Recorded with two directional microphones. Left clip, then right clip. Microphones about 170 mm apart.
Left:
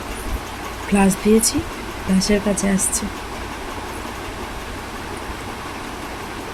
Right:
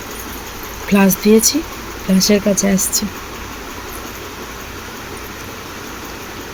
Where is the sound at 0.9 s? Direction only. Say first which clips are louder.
Right 4 dB; 20° right (ahead or behind).